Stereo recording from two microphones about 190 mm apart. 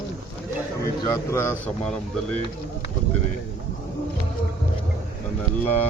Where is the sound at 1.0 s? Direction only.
15° left (ahead or behind).